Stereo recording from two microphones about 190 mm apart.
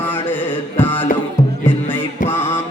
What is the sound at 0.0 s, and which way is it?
Music, 10° left (ahead or behind).